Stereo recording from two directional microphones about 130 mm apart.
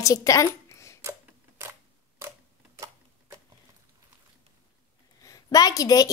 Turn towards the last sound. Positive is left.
turn(degrees=30)  # may be behind; listen again after turning